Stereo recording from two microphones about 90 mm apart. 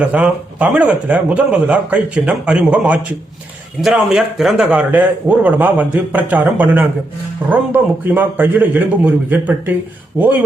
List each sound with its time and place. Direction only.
0.0 s a man's voice: 15° right (ahead or behind)
4.7 s a man's voice: 20° right (ahead or behind)